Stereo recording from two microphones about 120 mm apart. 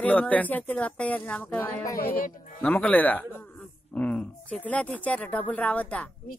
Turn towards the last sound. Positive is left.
turn(degrees=10)  # may be behind; listen again after turning